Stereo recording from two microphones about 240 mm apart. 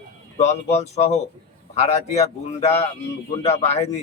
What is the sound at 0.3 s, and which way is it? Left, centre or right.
Speech, left.